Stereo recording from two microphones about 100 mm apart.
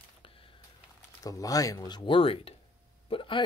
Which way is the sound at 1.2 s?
35° left (ahead or behind).